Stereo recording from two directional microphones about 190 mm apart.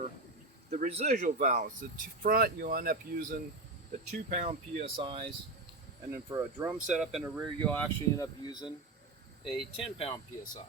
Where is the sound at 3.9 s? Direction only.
40° right (ahead or behind).